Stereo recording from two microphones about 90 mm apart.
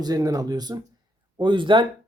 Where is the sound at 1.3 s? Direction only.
60° right (ahead or behind).